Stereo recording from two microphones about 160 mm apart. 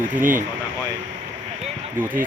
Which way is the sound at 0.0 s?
55° right (ahead or behind).